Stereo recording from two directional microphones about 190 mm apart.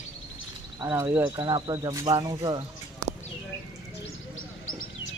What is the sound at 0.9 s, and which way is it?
Speech, 10° right (ahead or behind).